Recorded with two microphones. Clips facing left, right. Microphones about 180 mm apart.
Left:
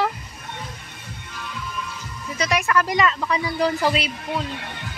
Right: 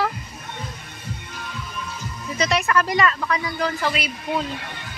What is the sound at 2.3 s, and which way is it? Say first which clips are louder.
Speech: right 1 dB; 10° left (ahead or behind).